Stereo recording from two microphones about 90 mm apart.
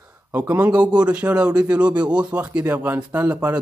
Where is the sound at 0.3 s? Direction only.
20° right (ahead or behind).